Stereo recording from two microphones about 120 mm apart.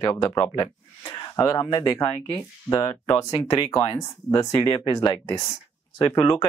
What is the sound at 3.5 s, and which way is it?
Speech, 40° left (ahead or behind).